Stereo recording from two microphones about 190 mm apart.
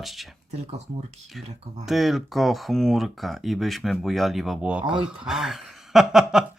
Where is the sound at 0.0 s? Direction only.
Centre (ahead or behind).